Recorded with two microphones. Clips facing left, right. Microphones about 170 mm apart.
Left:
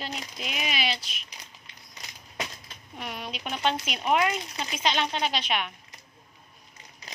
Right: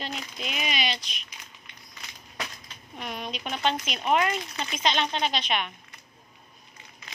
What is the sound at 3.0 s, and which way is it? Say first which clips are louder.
Speech: right 1 dB; 10° left (ahead or behind).